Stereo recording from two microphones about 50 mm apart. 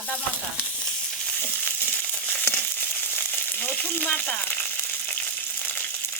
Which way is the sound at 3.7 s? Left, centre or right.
Left.